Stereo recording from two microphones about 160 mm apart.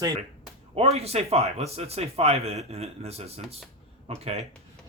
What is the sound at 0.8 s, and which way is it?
A man's voice, 40° right (ahead or behind).